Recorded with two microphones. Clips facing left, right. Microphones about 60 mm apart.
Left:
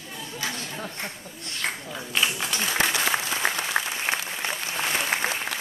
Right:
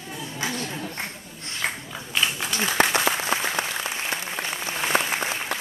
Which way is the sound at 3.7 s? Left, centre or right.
Left.